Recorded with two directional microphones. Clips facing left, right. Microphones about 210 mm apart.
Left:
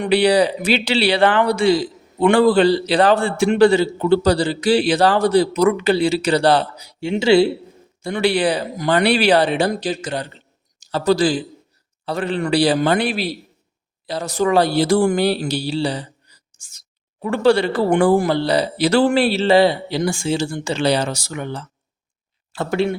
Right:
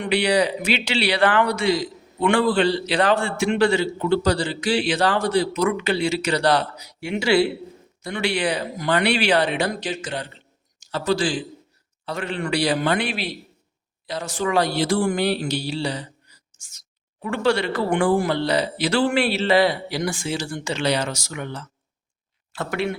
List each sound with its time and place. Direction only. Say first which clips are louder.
0.0 s a man's voice: left 5 dB; 35° left (ahead or behind)